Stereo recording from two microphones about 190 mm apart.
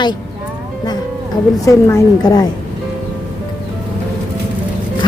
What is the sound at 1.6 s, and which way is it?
Speech, 15° left (ahead or behind).